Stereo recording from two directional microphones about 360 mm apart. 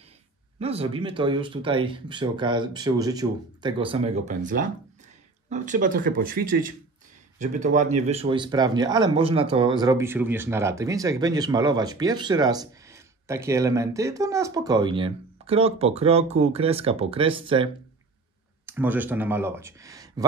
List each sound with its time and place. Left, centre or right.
0.6 s speech: centre
18.7 s speech: centre